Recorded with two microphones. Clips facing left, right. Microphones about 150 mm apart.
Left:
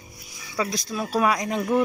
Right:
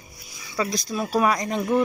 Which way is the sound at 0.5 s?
5° left (ahead or behind).